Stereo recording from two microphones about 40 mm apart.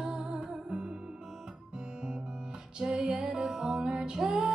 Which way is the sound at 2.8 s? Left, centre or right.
Centre.